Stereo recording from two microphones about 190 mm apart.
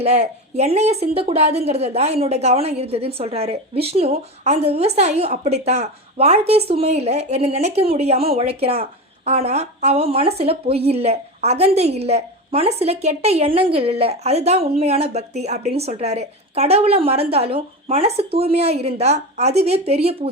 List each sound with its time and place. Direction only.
0.0 s a woman's voice: 35° right (ahead or behind)